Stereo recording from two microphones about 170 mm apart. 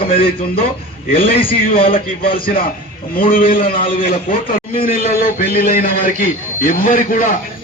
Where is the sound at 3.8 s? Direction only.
30° left (ahead or behind).